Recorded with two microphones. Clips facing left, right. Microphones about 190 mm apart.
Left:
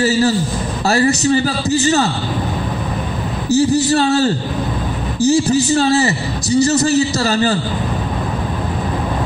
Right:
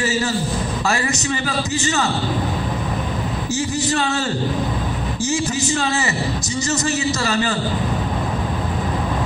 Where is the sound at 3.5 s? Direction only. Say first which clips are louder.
Left 10 dB; 35° left (ahead or behind).